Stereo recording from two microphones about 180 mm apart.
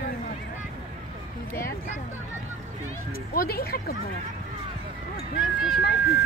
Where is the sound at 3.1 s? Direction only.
55° left (ahead or behind).